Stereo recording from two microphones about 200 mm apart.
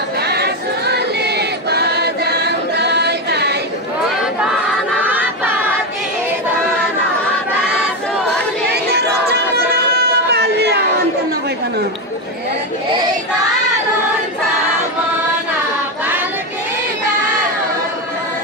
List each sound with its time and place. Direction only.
0.2 s choir: 55° right (ahead or behind)
5.0 s crowd: 10° right (ahead or behind)
8.6 s a sound: 55° right (ahead or behind)